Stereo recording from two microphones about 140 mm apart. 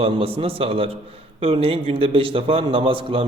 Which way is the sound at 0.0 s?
40° right (ahead or behind).